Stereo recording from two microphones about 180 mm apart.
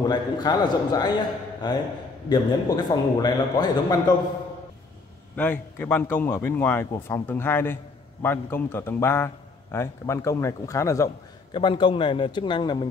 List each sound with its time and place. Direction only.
0.0 s a man's voice: 25° left (ahead or behind)
5.3 s a man's voice: 10° left (ahead or behind); by 12.8 s 25° left (ahead or behind)